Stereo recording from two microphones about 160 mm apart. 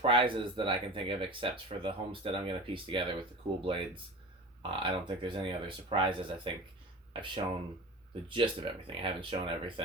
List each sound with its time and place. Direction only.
0.0 s speech: 35° right (ahead or behind)